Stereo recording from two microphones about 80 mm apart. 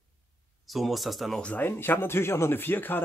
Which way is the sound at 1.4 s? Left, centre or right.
Left.